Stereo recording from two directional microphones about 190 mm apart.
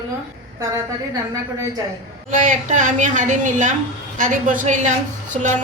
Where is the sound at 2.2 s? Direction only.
40° right (ahead or behind).